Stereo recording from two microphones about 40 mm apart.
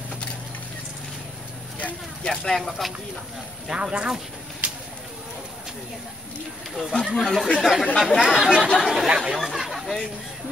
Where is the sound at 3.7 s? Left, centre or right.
Right.